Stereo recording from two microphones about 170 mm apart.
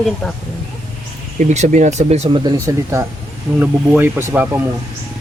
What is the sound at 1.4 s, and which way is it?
Speech, 45° right (ahead or behind).